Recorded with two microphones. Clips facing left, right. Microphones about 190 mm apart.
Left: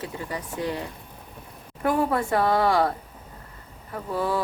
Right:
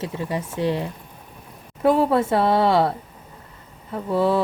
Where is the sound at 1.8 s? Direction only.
25° right (ahead or behind).